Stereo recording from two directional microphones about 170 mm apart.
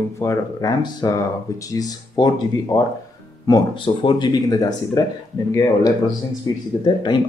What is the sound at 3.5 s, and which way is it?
Speech, 25° left (ahead or behind).